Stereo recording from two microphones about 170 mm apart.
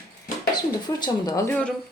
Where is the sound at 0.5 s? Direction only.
25° left (ahead or behind).